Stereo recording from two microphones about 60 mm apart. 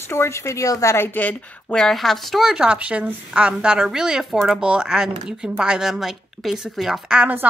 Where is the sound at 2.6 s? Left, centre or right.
Right; by 7.2 s centre.